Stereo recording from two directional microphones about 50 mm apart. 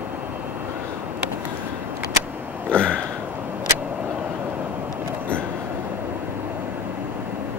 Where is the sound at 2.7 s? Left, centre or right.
Left.